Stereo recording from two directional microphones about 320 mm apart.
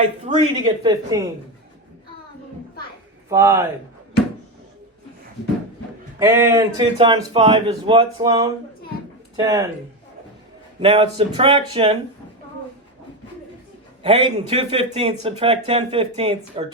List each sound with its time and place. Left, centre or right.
0.3 s speech: centre
3.2 s speech: centre
6.1 s speech: centre
10.8 s speech: centre
14.0 s speech: centre